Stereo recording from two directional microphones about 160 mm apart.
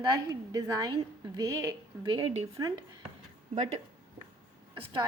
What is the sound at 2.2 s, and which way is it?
Speech, 30° right (ahead or behind).